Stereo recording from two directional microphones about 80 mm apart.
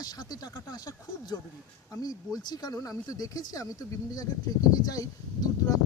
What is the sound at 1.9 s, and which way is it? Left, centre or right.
Speech, left.